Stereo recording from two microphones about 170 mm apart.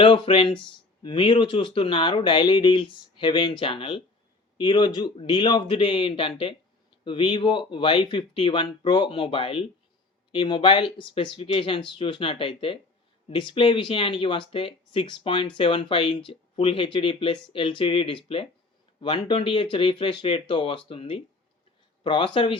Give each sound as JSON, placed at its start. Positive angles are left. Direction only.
{"t": 0.0, "sound": "speech", "side_deg": 30}